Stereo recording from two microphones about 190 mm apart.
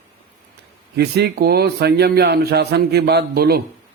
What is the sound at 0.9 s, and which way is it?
Speech, 60° right (ahead or behind).